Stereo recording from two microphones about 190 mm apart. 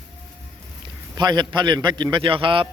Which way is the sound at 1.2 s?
20° right (ahead or behind).